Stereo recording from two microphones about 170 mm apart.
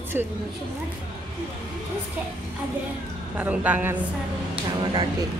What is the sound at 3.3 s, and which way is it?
Speech, 10° right (ahead or behind).